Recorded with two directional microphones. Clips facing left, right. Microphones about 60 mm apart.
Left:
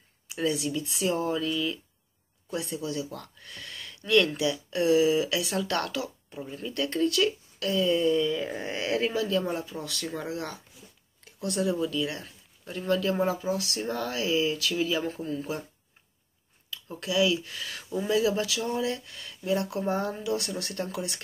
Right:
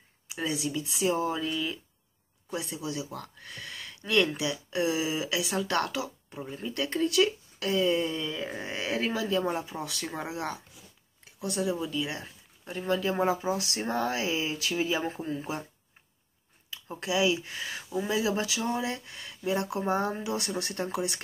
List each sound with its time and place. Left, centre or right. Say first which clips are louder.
0.3 s speech: left 3 dB; centre
8.4 s speech: left 3 dB; centre
9.2 s speech: left 1 dB; centre
11.3 s speech: left 2 dB; centre
11.9 s speech: left 2 dB; centre
16.7 s speech: left 2 dB; right